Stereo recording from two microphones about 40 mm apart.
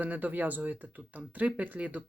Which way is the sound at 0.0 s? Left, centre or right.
Right.